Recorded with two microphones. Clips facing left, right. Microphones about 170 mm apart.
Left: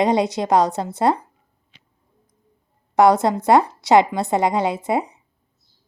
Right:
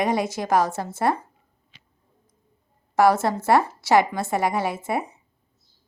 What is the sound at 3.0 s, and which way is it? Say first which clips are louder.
Speech: left 4 dB; 20° left (ahead or behind).